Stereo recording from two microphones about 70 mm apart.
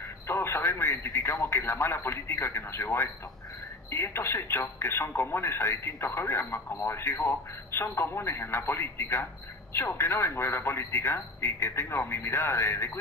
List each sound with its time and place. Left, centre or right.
0.3 s speech: left